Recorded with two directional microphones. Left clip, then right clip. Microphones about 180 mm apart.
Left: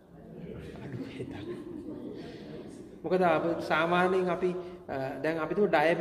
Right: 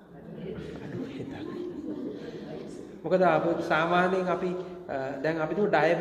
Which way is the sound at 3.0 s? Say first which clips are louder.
Right 3 dB; 50° left (ahead or behind).